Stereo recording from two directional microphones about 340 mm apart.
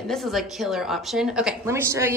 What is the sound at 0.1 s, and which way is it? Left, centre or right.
A woman's voice, centre.